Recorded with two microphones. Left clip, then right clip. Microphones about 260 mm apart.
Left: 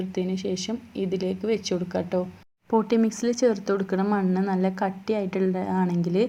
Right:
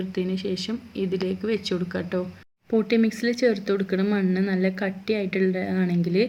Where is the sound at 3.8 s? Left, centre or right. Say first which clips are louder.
Even; left.